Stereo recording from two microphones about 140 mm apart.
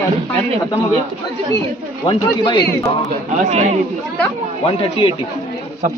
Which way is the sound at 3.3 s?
55° right (ahead or behind).